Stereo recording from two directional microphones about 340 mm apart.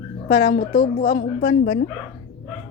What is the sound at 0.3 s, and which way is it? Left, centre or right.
A woman's voice, centre.